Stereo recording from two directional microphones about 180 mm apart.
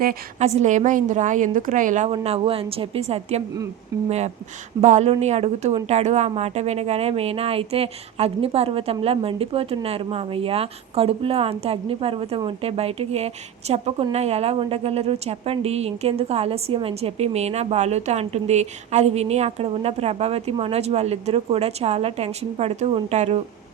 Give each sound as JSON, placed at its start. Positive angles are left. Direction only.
{"t": 0.3, "sound": "a woman's voice", "side_deg": -35}
{"t": 4.8, "sound": "a woman's voice", "side_deg": -40}